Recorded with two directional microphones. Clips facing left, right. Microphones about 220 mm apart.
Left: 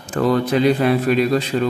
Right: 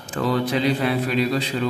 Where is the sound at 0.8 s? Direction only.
50° left (ahead or behind).